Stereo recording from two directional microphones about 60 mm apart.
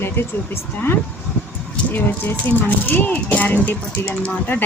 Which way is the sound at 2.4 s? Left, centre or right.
Left.